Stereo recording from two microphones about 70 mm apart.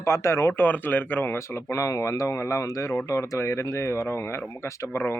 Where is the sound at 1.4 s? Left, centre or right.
Left.